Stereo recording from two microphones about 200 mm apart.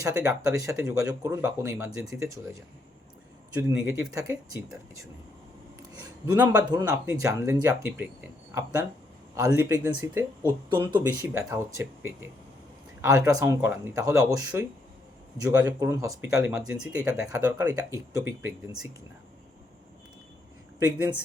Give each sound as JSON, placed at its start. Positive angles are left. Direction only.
{"t": 0.0, "sound": "speech", "side_deg": -15}
{"t": 3.6, "sound": "speech", "side_deg": -15}
{"t": 5.9, "sound": "a sound", "side_deg": -20}
{"t": 6.6, "sound": "speech", "side_deg": -20}
{"t": 9.3, "sound": "speech", "side_deg": -15}